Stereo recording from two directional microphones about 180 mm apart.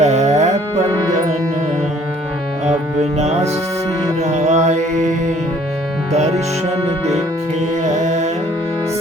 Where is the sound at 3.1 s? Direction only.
40° right (ahead or behind).